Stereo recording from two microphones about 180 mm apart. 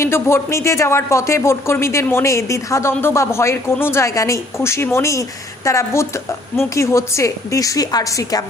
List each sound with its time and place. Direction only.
0.0 s speech: 15° left (ahead or behind)